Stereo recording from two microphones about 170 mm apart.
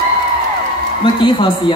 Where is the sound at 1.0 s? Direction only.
25° left (ahead or behind).